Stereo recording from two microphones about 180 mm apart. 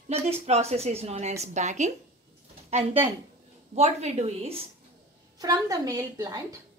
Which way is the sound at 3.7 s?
35° right (ahead or behind).